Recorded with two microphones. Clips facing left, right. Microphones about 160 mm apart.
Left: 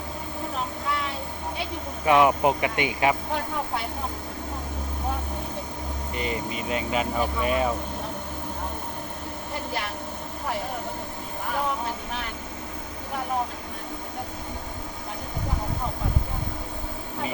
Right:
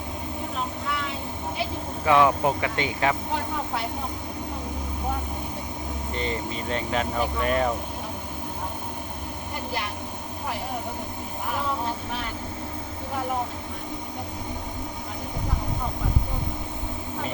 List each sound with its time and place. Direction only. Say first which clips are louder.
2.0 s speech: left 1 dB; 15° left (ahead or behind)
6.1 s speech: even; 10° left (ahead or behind)